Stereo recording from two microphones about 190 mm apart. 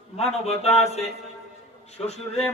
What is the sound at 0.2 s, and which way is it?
Speech, 35° left (ahead or behind).